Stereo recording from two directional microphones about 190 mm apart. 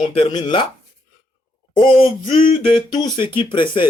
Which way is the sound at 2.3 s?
45° left (ahead or behind).